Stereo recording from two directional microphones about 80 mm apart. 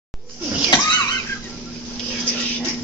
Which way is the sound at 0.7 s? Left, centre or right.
Left.